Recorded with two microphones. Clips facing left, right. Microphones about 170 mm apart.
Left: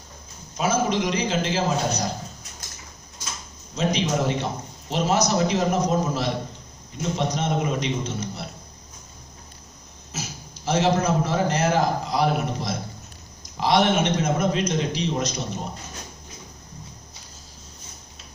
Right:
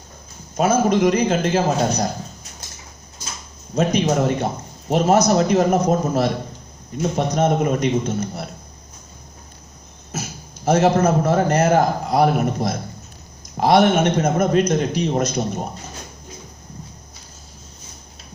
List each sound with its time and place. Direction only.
0.6 s a man's voice: 50° right (ahead or behind)
3.7 s a man's voice: 50° right (ahead or behind)
10.1 s a man's voice: 50° right (ahead or behind)